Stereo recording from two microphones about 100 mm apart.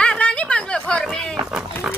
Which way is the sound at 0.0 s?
10° left (ahead or behind).